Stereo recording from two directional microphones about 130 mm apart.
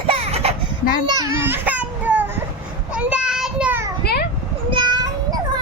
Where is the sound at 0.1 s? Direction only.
50° right (ahead or behind).